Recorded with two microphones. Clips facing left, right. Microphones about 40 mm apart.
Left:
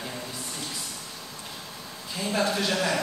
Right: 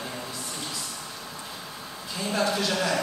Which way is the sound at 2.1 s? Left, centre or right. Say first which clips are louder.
Even; centre.